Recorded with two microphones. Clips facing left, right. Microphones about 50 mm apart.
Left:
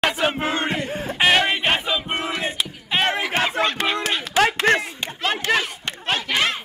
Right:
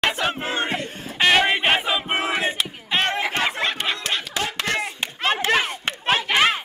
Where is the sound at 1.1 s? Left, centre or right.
Centre.